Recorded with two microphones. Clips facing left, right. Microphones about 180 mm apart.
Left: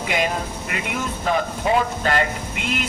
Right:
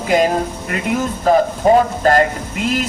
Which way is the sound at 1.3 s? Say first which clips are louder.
Right 9 dB; 40° right (ahead or behind).